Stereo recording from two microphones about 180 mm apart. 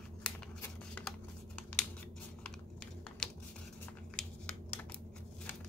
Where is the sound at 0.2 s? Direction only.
5° left (ahead or behind).